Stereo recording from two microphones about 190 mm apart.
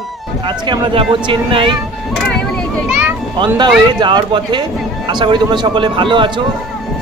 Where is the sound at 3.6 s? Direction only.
25° right (ahead or behind).